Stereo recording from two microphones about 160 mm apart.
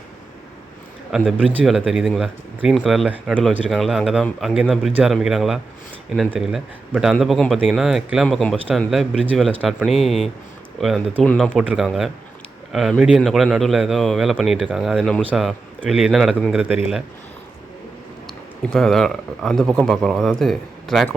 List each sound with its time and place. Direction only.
1.4 s speech: 10° right (ahead or behind)
11.5 s speech: 5° right (ahead or behind)
18.3 s speech: centre (ahead or behind)